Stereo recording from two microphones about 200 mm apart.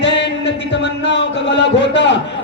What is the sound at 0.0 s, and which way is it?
A man's voice, 60° left (ahead or behind).